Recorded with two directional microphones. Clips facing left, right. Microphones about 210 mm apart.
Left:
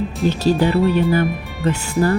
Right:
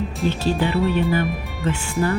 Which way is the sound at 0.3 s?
40° left (ahead or behind).